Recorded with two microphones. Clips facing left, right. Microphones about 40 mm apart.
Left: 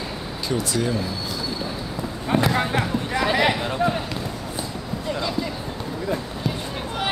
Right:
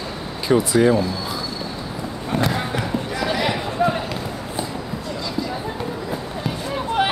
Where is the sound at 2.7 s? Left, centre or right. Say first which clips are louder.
Left 1 dB; left.